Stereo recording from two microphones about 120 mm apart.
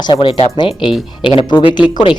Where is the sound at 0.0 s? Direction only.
45° left (ahead or behind).